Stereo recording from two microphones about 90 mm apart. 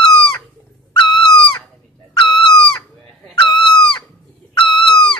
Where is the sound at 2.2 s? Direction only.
65° left (ahead or behind).